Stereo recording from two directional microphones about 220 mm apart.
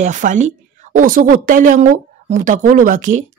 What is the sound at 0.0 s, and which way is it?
A woman's voice, 35° right (ahead or behind).